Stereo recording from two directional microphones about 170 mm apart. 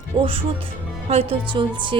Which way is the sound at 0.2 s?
35° right (ahead or behind).